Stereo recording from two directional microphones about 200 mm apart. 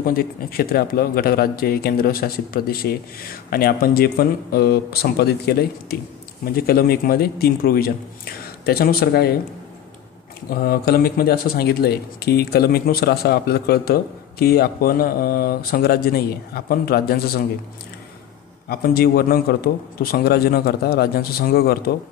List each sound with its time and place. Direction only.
0.0 s a man's voice: 45° left (ahead or behind)
10.5 s a man's voice: 50° left (ahead or behind)
18.7 s a man's voice: 50° left (ahead or behind)